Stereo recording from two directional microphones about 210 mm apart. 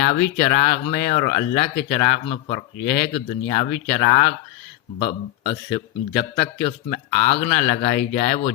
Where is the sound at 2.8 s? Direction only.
55° left (ahead or behind).